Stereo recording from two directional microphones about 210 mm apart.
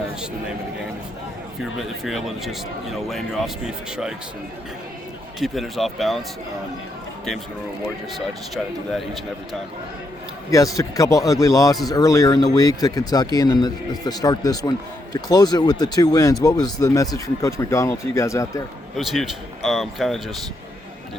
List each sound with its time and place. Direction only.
2.0 s a man's voice: centre (ahead or behind)
5.4 s a man's voice: centre (ahead or behind)
8.5 s a man's voice: centre (ahead or behind)
10.5 s a man's voice: 15° left (ahead or behind)
18.9 s a man's voice: centre (ahead or behind)